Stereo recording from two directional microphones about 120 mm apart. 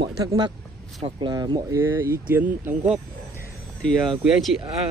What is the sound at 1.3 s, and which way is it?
Speech, 35° right (ahead or behind).